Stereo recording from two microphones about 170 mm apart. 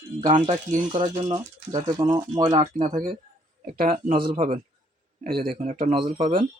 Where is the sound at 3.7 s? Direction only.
55° right (ahead or behind).